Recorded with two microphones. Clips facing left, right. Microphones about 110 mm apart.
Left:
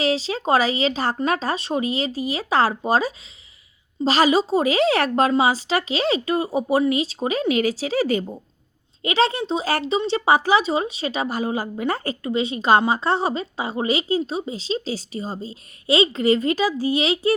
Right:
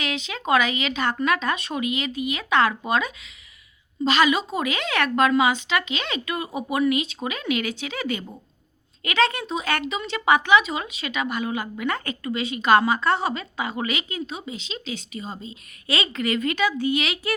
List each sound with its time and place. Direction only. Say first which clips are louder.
0.0 s speech: left 7 dB; 35° left (ahead or behind)